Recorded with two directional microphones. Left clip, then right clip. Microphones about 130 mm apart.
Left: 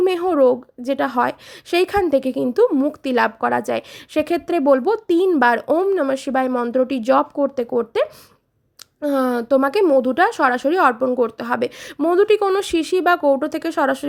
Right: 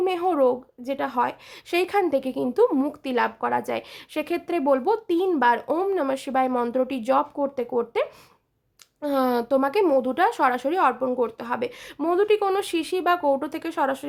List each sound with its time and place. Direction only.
0.0 s a woman's voice: 35° left (ahead or behind); by 3.0 s 15° left (ahead or behind)
3.0 s a woman's voice: 35° left (ahead or behind)
5.6 s a woman's voice: 20° left (ahead or behind); by 14.0 s 35° left (ahead or behind)